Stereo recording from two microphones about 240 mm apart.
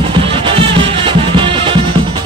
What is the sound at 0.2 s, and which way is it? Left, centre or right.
Music, right.